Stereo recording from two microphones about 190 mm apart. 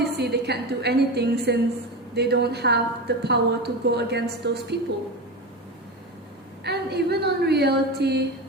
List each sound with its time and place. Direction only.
0.0 s a woman's voice: 60° right (ahead or behind)
6.7 s a woman's voice: 60° right (ahead or behind)